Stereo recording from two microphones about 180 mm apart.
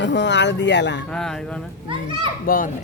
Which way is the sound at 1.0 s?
5° left (ahead or behind).